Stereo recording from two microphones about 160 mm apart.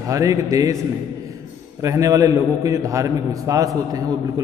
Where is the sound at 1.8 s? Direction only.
20° right (ahead or behind).